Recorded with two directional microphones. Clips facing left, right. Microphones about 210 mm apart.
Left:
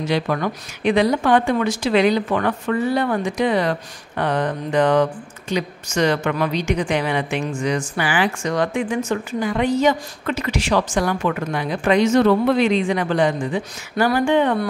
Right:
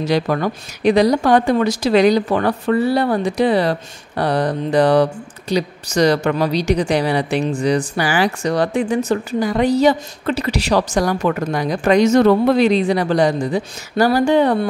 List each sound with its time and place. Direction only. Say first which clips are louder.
0.0 s speech: right 3 dB; 40° right (ahead or behind)